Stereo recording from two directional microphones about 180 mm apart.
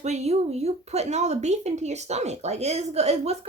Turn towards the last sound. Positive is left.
turn(degrees=-35)  # may be behind; listen again after turning